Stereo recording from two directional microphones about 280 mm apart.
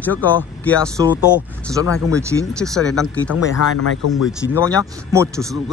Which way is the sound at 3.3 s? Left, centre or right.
Left.